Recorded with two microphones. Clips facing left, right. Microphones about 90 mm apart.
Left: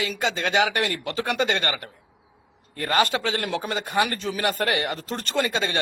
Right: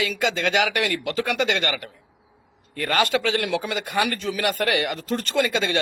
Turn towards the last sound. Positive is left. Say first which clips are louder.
# right 2 dB
turn(degrees=30)  # may be behind; listen again after turning